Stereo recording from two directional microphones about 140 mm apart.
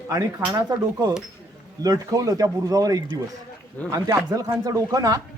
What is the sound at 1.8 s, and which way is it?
Speech, 25° right (ahead or behind).